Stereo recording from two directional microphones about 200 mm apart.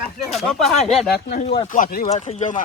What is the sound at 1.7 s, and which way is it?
Speech, 40° left (ahead or behind).